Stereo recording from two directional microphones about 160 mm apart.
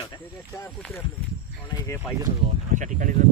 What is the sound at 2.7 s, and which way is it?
Speech, 55° right (ahead or behind).